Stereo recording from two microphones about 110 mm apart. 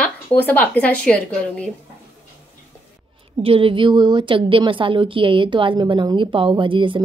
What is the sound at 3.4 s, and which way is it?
A woman's voice, 55° right (ahead or behind).